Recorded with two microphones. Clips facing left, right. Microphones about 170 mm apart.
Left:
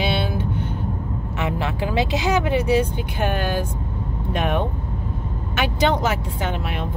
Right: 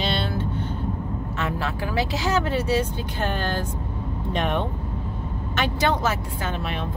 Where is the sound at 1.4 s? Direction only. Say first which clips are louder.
Left 4 dB; 20° left (ahead or behind).